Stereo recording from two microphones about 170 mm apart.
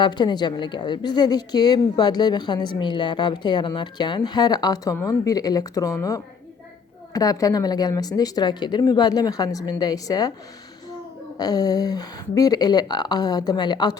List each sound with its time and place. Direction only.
0.0 s a woman's voice: 25° left (ahead or behind)
11.3 s a woman's voice: 20° left (ahead or behind)